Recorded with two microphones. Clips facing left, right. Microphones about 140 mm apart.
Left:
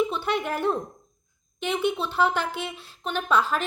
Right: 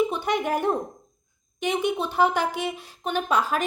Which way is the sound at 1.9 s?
15° right (ahead or behind).